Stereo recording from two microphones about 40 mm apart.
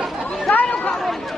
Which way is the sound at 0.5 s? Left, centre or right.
Left.